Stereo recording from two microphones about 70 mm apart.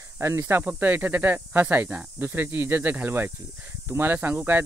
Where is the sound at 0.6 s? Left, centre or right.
Right.